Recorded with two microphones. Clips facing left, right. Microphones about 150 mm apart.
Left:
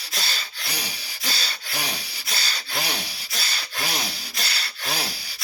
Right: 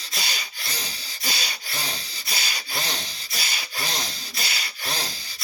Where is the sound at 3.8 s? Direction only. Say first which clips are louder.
Left 2 dB; 10° left (ahead or behind).